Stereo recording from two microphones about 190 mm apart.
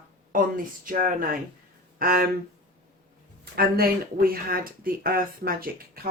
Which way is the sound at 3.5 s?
55° right (ahead or behind).